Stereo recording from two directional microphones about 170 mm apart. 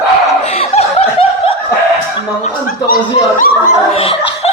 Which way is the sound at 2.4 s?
55° left (ahead or behind).